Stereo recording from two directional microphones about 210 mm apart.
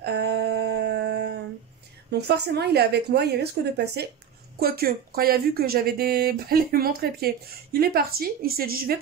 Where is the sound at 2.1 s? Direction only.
50° right (ahead or behind).